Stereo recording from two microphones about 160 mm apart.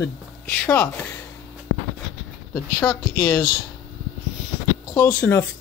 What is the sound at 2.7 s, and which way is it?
Speech, 20° left (ahead or behind).